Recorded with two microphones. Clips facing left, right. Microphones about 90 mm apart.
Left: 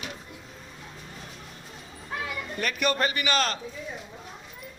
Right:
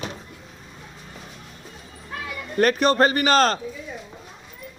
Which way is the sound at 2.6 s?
40° right (ahead or behind).